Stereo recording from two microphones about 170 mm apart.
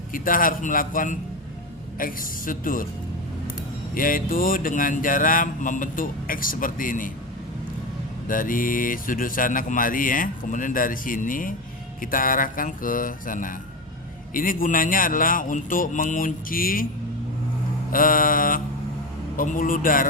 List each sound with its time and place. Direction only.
0.1 s a man's voice: 55° left (ahead or behind)
3.9 s speech: 55° left (ahead or behind)
8.3 s speech: 55° left (ahead or behind)
17.9 s a man's voice: 55° left (ahead or behind)